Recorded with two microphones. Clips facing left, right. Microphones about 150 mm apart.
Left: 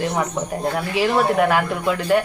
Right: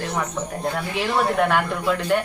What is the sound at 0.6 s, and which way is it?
A child's voice, 5° left (ahead or behind).